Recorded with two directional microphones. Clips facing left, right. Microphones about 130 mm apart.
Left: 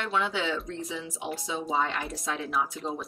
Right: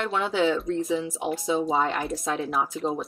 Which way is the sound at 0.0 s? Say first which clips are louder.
Right 5 dB; 40° right (ahead or behind).